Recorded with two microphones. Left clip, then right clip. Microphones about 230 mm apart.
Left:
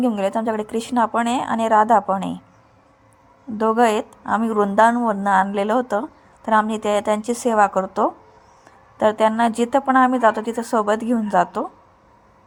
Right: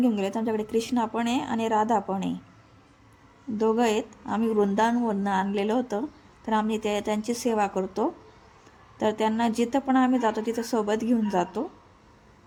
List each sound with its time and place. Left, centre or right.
0.0 s a woman's voice: centre
3.6 s a woman's voice: centre